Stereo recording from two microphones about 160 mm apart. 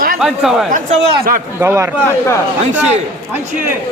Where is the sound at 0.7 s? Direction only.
55° right (ahead or behind).